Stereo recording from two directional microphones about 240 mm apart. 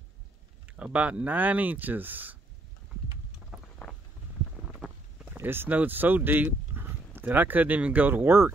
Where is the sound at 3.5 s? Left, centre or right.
Centre.